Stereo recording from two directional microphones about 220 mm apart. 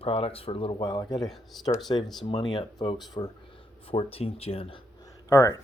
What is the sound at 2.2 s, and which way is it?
Speech, 20° left (ahead or behind).